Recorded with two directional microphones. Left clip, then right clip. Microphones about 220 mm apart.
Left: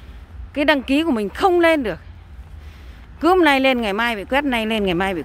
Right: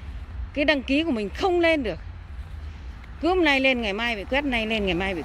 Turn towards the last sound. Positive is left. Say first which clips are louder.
# left 5 dB
turn(degrees=20)  # may be behind; listen again after turning